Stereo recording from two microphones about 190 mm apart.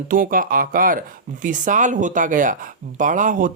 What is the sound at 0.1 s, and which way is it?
Speech, 45° right (ahead or behind).